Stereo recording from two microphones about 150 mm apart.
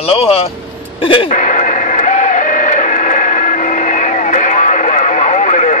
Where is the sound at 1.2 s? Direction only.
55° left (ahead or behind).